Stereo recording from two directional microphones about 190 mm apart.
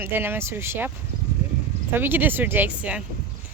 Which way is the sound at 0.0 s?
10° right (ahead or behind).